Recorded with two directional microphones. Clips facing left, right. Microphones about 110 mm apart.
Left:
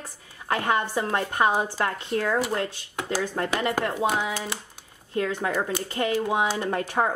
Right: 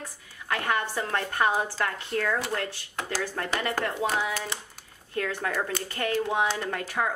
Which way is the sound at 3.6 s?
20° left (ahead or behind).